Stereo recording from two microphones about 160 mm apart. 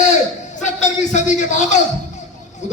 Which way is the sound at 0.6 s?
50° left (ahead or behind).